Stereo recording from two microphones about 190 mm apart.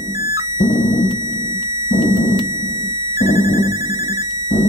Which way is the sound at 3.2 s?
15° right (ahead or behind).